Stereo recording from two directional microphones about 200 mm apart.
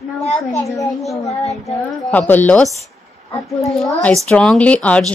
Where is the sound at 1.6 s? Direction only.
10° left (ahead or behind).